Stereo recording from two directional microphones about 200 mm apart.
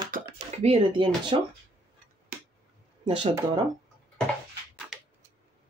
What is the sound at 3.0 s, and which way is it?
Speech, 25° right (ahead or behind).